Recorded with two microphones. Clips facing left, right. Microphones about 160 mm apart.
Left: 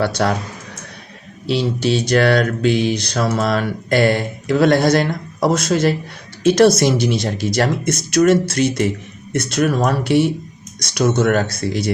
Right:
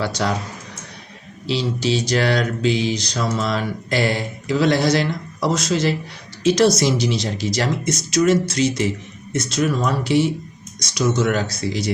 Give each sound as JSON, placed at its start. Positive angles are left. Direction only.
{"t": 0.0, "sound": "speech", "side_deg": 55}
{"t": 1.5, "sound": "speech", "side_deg": 55}